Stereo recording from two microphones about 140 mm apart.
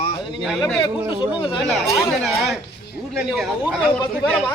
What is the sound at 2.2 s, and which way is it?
Speech, centre (ahead or behind).